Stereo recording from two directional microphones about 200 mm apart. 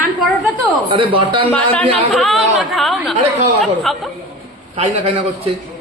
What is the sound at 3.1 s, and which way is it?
Speech, 35° right (ahead or behind).